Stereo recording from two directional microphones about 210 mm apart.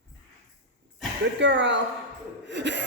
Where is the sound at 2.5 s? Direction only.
55° right (ahead or behind).